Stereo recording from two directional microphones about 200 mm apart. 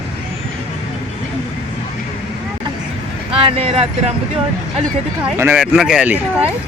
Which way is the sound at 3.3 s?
25° right (ahead or behind).